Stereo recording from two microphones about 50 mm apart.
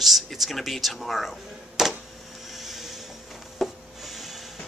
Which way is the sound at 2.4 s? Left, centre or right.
Centre.